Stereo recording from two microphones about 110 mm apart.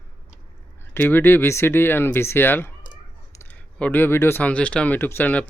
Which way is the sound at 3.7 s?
15° left (ahead or behind).